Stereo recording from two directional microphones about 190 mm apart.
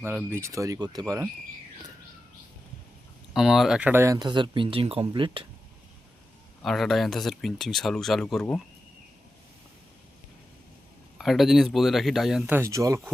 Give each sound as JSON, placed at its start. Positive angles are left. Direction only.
{"t": 0.0, "sound": "speech", "side_deg": -10}
{"t": 3.3, "sound": "speech", "side_deg": 0}
{"t": 6.6, "sound": "speech", "side_deg": 0}
{"t": 11.2, "sound": "speech", "side_deg": 0}